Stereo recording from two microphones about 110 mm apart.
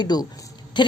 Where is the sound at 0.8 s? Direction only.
45° left (ahead or behind).